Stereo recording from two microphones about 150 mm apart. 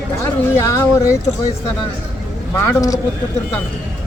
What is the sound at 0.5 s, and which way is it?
Speech, 20° left (ahead or behind).